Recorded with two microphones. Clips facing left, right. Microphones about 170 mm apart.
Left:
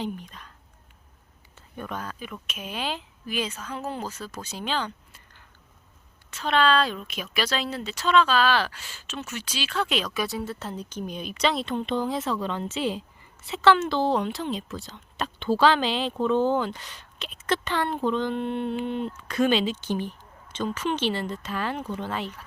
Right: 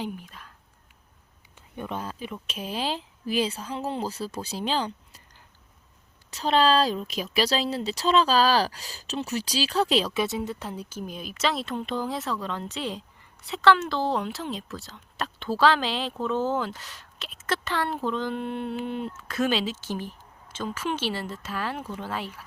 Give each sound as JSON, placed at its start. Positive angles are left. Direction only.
{"t": 0.0, "sound": "speech", "side_deg": -5}
{"t": 1.5, "sound": "speech", "side_deg": -20}
{"t": 6.3, "sound": "a woman's voice", "side_deg": -35}